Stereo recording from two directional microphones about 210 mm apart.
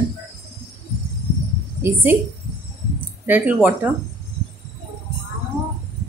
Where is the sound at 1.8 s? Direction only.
10° right (ahead or behind).